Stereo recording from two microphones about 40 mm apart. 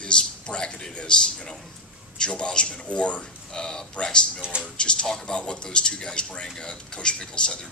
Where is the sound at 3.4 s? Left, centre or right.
Centre.